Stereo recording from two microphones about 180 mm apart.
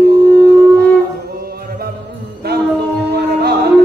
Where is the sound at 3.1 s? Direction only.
65° right (ahead or behind).